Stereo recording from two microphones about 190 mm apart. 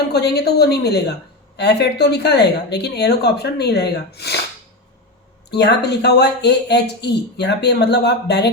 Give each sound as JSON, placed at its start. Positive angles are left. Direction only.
{"t": 0.1, "sound": "speech", "side_deg": 60}
{"t": 5.5, "sound": "speech", "side_deg": 60}